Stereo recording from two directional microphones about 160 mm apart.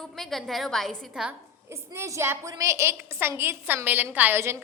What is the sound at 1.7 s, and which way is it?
A woman's voice, 15° right (ahead or behind).